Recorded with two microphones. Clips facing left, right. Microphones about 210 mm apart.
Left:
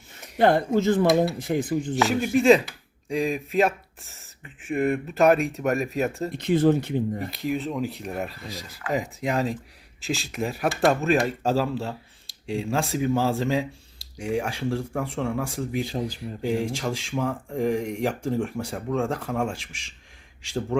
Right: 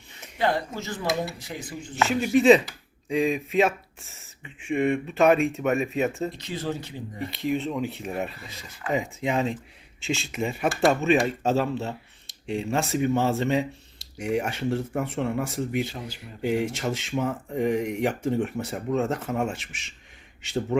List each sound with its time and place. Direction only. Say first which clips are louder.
0.3 s speech: left 7 dB; 55° left (ahead or behind)
2.3 s speech: right 1 dB; centre (ahead or behind)
6.3 s speech: left 11 dB; 55° left (ahead or behind)
7.3 s speech: right 1 dB; centre (ahead or behind)